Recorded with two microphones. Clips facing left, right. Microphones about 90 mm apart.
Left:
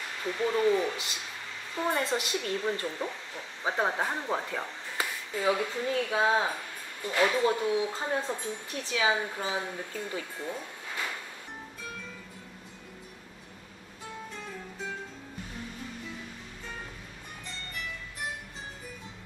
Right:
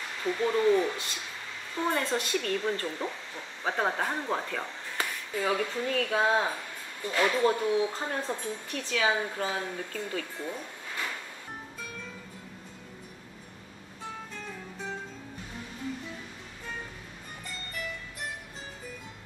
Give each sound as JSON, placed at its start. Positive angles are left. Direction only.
{"t": 0.5, "sound": "speech", "side_deg": 10}